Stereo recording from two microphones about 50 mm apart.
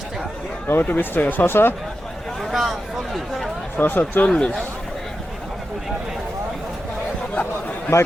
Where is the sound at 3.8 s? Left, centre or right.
Left.